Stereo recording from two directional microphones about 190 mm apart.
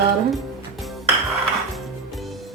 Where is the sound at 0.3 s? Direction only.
Centre (ahead or behind).